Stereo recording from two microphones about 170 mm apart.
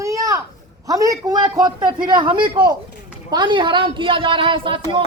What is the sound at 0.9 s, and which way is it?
Speech, 20° right (ahead or behind).